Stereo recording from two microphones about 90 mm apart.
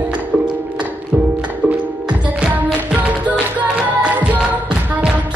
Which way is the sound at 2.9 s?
15° right (ahead or behind).